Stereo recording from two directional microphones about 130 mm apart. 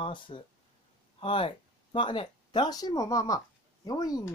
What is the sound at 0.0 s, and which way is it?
Speech, 40° left (ahead or behind).